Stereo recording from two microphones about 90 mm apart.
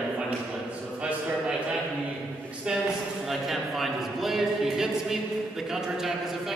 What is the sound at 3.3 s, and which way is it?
A man's voice, centre (ahead or behind).